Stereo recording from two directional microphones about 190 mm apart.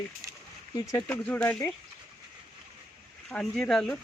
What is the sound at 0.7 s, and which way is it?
Speech, 15° left (ahead or behind).